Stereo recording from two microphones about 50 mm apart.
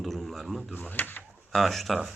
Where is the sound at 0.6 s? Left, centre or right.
Left.